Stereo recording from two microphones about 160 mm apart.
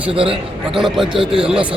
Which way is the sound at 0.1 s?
35° right (ahead or behind).